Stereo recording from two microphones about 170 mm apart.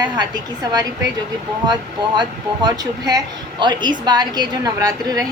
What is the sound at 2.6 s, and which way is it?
A woman's voice, 20° right (ahead or behind).